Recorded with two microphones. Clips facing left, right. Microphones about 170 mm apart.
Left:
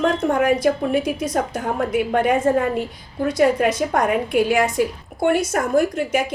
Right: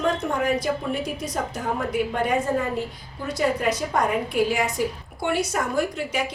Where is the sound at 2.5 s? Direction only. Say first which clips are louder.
Left 6 dB; 65° left (ahead or behind).